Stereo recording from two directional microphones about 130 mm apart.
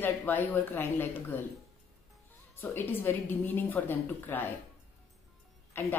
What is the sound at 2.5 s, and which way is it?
A woman's voice, 15° left (ahead or behind).